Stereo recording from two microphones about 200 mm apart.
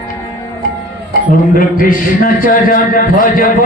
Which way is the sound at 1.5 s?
45° left (ahead or behind).